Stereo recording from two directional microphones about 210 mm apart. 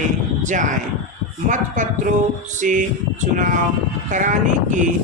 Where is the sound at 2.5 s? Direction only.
35° right (ahead or behind).